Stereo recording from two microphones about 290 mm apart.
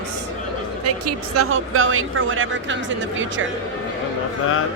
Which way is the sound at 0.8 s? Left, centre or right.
Right.